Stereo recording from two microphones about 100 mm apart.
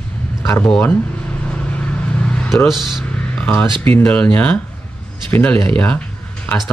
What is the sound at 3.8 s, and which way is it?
Speech, 20° left (ahead or behind).